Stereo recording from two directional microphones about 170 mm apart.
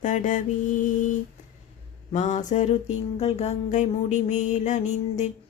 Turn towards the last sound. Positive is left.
turn(degrees=45)  # may be behind; listen again after turning